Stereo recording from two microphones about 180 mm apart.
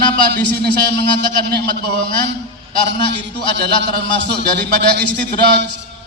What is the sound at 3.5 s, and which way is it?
A man's voice, 75° right (ahead or behind).